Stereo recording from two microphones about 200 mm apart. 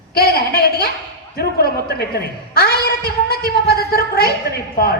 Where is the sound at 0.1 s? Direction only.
50° left (ahead or behind).